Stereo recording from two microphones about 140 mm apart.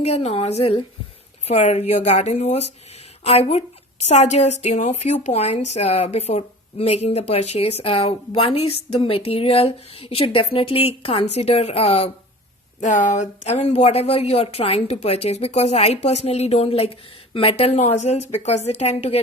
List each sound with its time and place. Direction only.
0.0 s a woman's voice: 50° left (ahead or behind)
12.8 s a woman's voice: 60° left (ahead or behind)